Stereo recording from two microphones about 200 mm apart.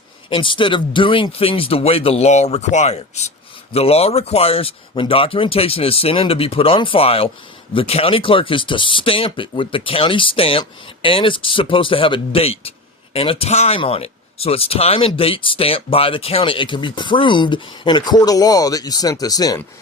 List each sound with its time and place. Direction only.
0.3 s speech: 25° left (ahead or behind)